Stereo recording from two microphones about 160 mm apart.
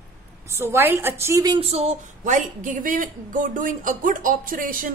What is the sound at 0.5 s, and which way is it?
A woman's voice, 15° right (ahead or behind).